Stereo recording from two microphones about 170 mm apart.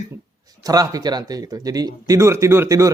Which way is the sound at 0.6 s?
20° right (ahead or behind).